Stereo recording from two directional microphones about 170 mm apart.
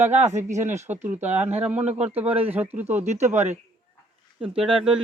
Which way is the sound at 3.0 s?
40° right (ahead or behind).